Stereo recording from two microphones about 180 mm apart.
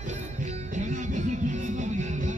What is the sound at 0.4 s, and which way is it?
Music, 45° right (ahead or behind).